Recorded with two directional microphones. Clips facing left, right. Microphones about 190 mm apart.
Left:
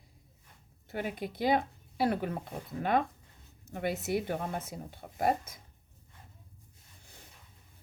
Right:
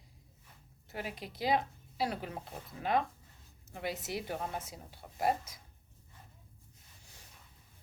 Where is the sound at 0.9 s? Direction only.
55° left (ahead or behind).